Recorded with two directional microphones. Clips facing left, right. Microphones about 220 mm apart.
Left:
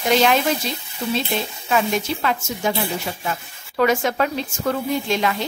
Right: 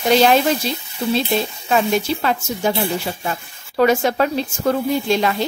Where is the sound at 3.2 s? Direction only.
35° right (ahead or behind).